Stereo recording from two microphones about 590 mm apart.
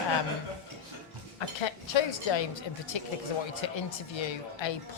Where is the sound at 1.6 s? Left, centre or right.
Left.